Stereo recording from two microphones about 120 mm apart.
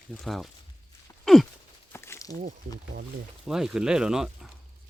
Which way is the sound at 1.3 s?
Centre (ahead or behind).